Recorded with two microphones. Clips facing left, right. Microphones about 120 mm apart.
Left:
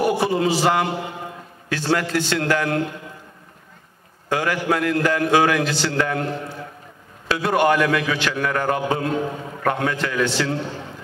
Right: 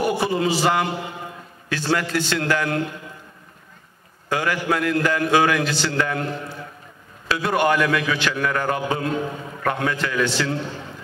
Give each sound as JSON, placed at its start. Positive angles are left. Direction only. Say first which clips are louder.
{"t": 0.0, "sound": "a man's voice", "louder": "left 2 dB", "side_deg": 55}
{"t": 4.3, "sound": "a man's voice", "louder": "left 1 dB", "side_deg": 45}
{"t": 5.7, "sound": "a man's voice", "louder": "left 1 dB", "side_deg": 60}
{"t": 10.5, "sound": "a man's voice", "louder": "left 1 dB", "side_deg": 40}